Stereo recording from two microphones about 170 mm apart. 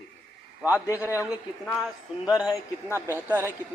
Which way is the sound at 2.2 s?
20° left (ahead or behind).